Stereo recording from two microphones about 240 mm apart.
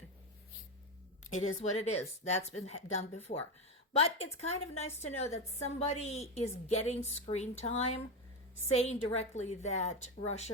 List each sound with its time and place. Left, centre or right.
1.3 s a woman's voice: left